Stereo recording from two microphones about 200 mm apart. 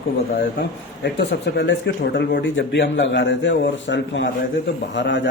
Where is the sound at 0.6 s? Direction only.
55° left (ahead or behind).